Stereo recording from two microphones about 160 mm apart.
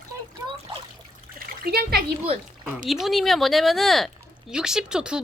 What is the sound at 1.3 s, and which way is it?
Splash, 75° right (ahead or behind).